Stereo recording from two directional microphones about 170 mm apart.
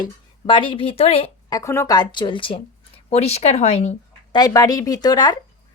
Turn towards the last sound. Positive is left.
turn(degrees=25)  # may be behind; listen again after turning